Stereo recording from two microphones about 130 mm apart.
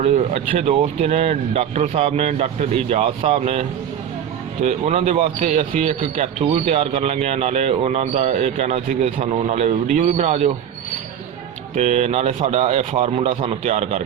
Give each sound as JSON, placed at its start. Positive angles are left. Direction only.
{"t": 0.0, "sound": "speech", "side_deg": -50}
{"t": 4.6, "sound": "speech", "side_deg": -60}
{"t": 6.7, "sound": "speech", "side_deg": -50}
{"t": 11.7, "sound": "speech", "side_deg": -60}